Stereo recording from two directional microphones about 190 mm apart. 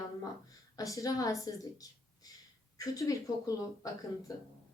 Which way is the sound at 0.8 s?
15° left (ahead or behind).